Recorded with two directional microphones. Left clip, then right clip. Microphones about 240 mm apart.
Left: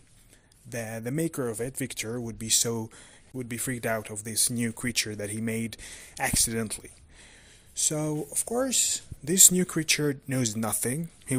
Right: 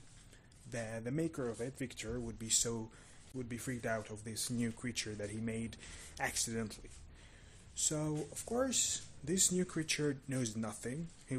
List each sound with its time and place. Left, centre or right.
0.7 s speech: left